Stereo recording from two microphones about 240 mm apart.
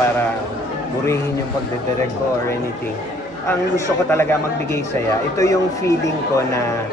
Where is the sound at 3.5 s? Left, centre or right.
Centre.